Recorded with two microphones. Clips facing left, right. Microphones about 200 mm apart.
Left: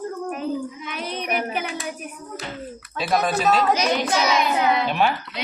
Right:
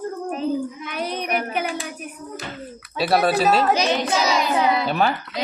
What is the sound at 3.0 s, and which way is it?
Speech, 35° right (ahead or behind).